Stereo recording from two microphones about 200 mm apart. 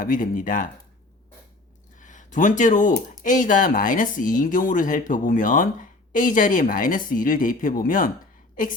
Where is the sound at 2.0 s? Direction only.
40° left (ahead or behind).